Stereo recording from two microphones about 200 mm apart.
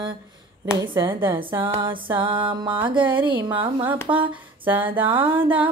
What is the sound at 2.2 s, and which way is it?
Music, 25° right (ahead or behind).